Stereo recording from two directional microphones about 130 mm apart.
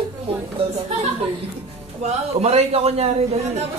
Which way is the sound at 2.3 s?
55° right (ahead or behind).